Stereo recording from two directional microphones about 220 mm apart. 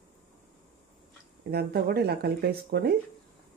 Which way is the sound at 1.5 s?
45° right (ahead or behind).